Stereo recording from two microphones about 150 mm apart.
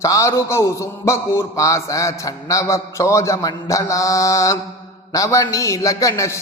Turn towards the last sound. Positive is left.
turn(degrees=20)  # may be behind; listen again after turning